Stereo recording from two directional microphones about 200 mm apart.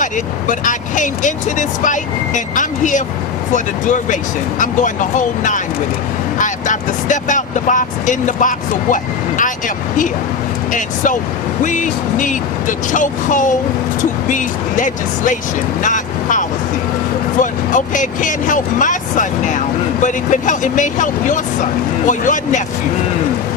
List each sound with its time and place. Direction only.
0.0 s speech: 40° left (ahead or behind)